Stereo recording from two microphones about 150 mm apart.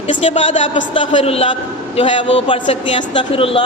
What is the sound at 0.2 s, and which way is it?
Speech, 45° left (ahead or behind).